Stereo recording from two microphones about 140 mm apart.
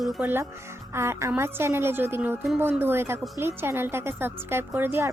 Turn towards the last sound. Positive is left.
turn(degrees=-15)  # may be behind; listen again after turning